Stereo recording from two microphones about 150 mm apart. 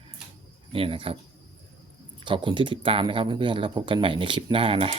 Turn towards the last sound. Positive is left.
turn(degrees=-40)  # may be behind; listen again after turning